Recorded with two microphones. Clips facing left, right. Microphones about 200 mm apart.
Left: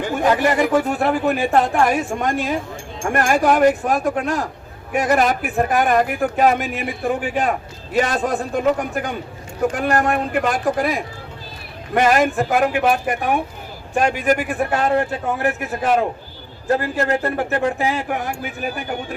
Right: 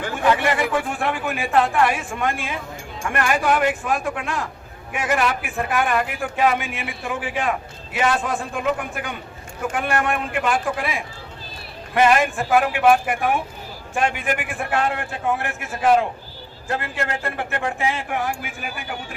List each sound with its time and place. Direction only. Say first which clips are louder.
0.1 s speech: left 2 dB; 40° left (ahead or behind)